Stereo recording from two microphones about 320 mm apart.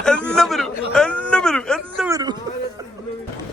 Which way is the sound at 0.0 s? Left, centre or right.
Centre.